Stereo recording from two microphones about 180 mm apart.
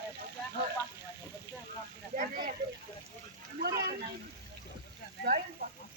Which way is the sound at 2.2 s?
55° right (ahead or behind).